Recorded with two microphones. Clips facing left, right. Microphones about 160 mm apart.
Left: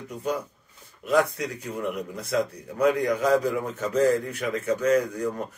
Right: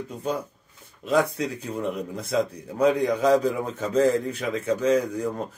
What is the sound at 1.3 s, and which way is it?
Speech, 25° right (ahead or behind).